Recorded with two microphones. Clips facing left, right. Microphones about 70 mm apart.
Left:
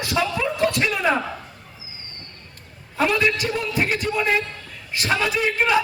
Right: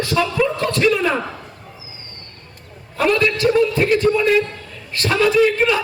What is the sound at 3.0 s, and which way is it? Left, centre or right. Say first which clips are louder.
A man's voice: right 4 dB; centre.